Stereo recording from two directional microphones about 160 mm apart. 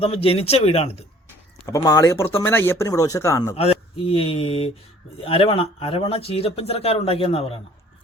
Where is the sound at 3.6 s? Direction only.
35° left (ahead or behind).